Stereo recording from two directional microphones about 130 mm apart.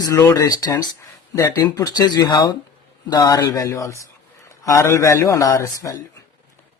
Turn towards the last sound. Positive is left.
turn(degrees=25)  # may be behind; listen again after turning